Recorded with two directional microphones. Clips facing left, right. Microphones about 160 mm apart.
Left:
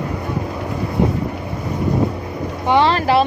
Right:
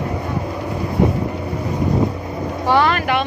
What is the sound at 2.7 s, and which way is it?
Vehicle, 25° left (ahead or behind).